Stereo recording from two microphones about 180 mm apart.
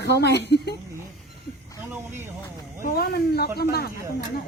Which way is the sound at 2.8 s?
60° left (ahead or behind).